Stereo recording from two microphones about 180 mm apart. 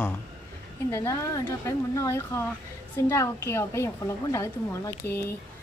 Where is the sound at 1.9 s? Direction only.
15° left (ahead or behind).